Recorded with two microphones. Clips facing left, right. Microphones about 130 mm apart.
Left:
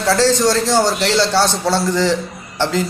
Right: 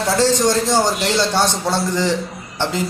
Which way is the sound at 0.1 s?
15° right (ahead or behind).